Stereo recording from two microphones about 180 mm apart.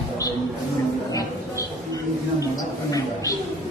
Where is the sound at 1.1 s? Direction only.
20° left (ahead or behind).